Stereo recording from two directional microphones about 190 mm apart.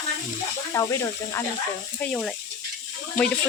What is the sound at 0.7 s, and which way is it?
Speech, 15° left (ahead or behind).